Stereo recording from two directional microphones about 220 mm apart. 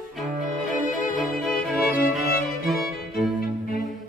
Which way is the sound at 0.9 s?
40° left (ahead or behind).